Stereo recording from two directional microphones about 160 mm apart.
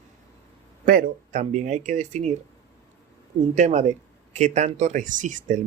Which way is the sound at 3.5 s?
50° right (ahead or behind).